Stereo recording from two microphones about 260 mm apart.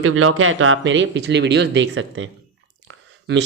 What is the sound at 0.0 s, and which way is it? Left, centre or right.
Speech, right.